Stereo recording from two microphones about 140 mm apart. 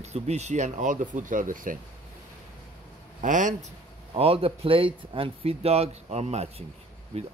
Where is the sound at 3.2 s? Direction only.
65° right (ahead or behind).